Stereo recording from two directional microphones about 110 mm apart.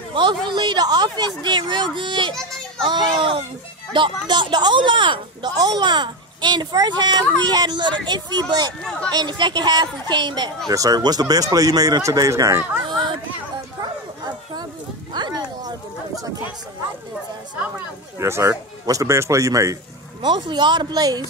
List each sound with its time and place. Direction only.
0.1 s a sound: 45° right (ahead or behind)
0.5 s speech: 45° right (ahead or behind)
13.7 s bow-wow: 40° right (ahead or behind)
15.1 s a sound: 40° right (ahead or behind)
18.2 s speech: 25° right (ahead or behind)
20.2 s speech: 45° right (ahead or behind)